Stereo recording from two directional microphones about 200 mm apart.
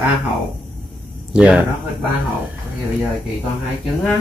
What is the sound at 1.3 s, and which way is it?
Speech, 5° right (ahead or behind).